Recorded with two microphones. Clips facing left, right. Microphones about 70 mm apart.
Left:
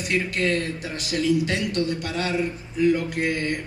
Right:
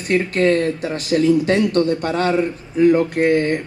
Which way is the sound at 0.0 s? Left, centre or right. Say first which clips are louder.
Right 7 dB; right.